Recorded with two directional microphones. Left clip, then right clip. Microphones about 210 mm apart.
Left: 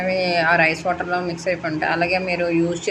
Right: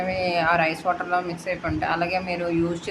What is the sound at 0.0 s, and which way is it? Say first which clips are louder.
Speech: left 4 dB; 5° left (ahead or behind).